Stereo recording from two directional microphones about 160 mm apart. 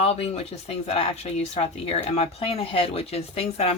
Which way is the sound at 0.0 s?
40° left (ahead or behind).